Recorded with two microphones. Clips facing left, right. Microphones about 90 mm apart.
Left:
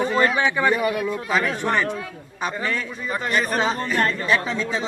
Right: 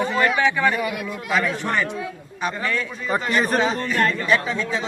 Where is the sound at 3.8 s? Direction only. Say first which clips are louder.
Right 1 dB; 30° left (ahead or behind).